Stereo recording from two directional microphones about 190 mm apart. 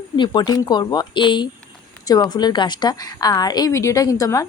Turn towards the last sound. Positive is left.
turn(degrees=15)  # may be behind; listen again after turning